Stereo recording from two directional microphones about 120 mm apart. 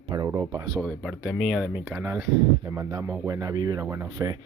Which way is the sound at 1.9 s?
20° right (ahead or behind).